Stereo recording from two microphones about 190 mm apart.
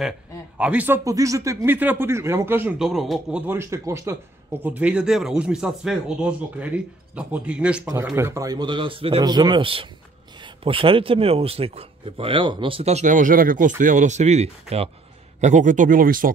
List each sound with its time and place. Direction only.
0.6 s a man's voice: 5° right (ahead or behind); by 16.3 s 45° right (ahead or behind)